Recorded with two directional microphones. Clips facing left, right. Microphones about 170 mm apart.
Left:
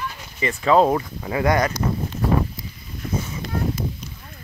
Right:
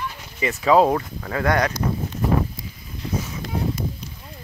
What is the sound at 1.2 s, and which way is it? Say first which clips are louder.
Speech: left 1 dB; 10° left (ahead or behind).